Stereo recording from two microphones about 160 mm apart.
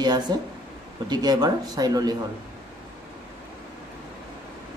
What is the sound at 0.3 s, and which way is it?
Speech, 25° right (ahead or behind).